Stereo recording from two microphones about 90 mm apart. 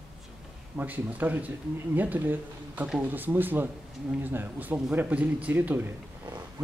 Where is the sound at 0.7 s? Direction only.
20° right (ahead or behind).